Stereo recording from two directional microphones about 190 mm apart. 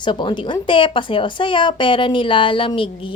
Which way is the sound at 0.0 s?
25° left (ahead or behind).